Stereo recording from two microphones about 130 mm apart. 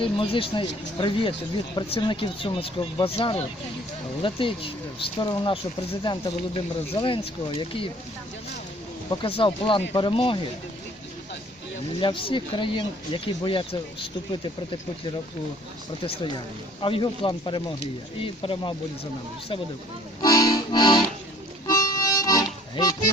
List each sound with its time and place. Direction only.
0.0 s speech: 45° left (ahead or behind)
6.9 s speech: 45° left (ahead or behind)
9.2 s speech: 45° left (ahead or behind)
11.9 s speech: 40° left (ahead or behind)
16.0 s speech: 40° left (ahead or behind)
20.2 s accordion: 30° left (ahead or behind)
21.7 s music: 30° left (ahead or behind)
22.7 s speech: 30° left (ahead or behind)